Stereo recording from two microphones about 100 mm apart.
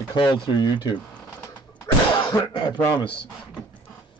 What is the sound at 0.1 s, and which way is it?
Speech, 50° left (ahead or behind).